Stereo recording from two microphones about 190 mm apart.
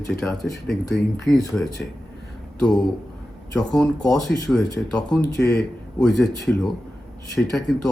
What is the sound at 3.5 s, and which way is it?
Speech, centre (ahead or behind).